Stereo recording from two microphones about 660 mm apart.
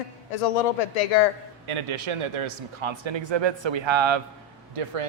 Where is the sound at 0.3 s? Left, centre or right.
Left.